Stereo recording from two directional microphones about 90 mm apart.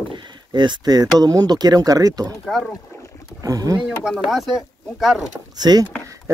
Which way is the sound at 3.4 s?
45° right (ahead or behind).